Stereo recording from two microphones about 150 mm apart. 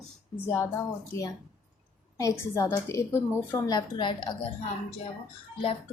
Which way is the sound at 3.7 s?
30° left (ahead or behind).